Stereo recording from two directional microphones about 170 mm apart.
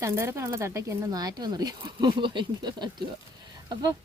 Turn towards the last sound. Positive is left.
turn(degrees=-25)  # may be behind; listen again after turning